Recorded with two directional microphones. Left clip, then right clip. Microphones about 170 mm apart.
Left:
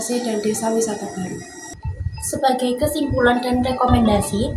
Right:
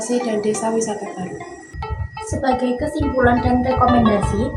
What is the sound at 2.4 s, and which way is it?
Speech, 15° left (ahead or behind).